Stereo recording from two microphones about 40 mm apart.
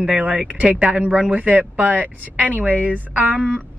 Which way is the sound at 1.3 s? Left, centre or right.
Right.